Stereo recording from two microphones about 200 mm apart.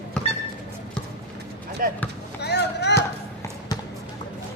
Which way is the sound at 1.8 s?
45° right (ahead or behind).